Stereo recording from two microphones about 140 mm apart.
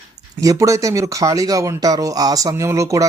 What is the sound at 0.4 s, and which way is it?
A man's voice, 25° right (ahead or behind).